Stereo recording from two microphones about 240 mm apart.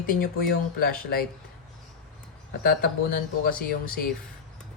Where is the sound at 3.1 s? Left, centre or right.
Left.